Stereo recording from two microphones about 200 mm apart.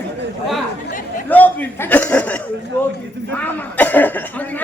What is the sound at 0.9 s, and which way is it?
Chatter, 40° left (ahead or behind).